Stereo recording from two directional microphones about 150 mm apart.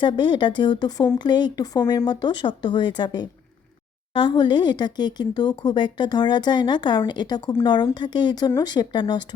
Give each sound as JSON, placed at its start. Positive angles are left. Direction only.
{"t": 0.0, "sound": "speech", "side_deg": 30}